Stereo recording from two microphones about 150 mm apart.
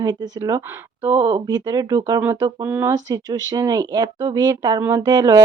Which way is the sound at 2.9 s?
25° right (ahead or behind).